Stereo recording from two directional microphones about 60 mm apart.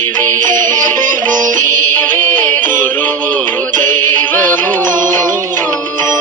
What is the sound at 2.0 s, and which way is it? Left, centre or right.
Music, left.